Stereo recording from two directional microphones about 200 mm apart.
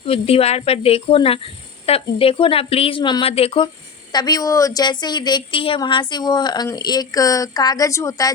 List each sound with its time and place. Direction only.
0.0 s speech: 30° left (ahead or behind)